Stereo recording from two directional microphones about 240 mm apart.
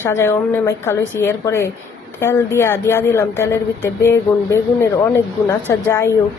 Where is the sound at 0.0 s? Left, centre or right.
Centre.